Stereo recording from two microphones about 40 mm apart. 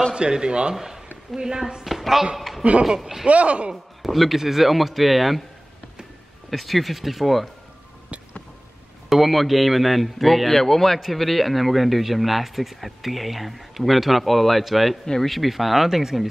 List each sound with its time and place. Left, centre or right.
0.1 s speech: right
0.7 s a man's voice: centre
1.9 s a sound: centre
2.3 s a man's voice: centre
3.3 s speech: right
3.7 s speech: centre
6.5 s speech: centre
9.1 s speech: centre